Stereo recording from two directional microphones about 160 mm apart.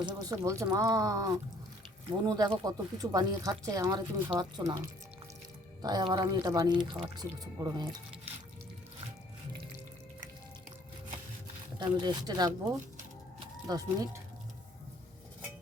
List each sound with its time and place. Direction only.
0.0 s speech: 20° right (ahead or behind)
11.9 s speech: 25° right (ahead or behind)
13.7 s speech: 20° right (ahead or behind)